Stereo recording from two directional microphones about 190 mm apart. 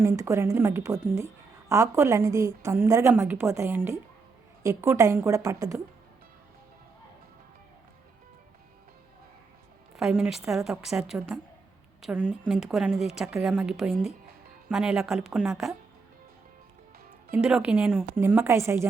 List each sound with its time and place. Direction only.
0.0 s a woman's voice: 15° right (ahead or behind)
10.0 s a woman's voice: 5° right (ahead or behind)
17.3 s a woman's voice: 5° right (ahead or behind)